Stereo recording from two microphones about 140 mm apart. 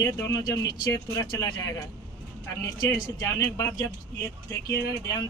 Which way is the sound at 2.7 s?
30° left (ahead or behind).